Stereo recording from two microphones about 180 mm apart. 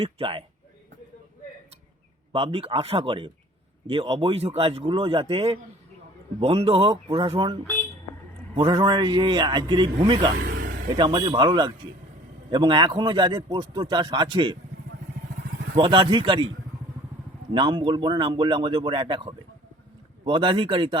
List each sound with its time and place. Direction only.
0.0 s speech: 30° right (ahead or behind)
2.3 s speech: 30° right (ahead or behind)
8.5 s speech: 25° right (ahead or behind)
10.3 s a sound: 55° right (ahead or behind)
10.9 s speech: 25° right (ahead or behind)
15.7 s speech: 30° right (ahead or behind)
17.5 s speech: 25° right (ahead or behind)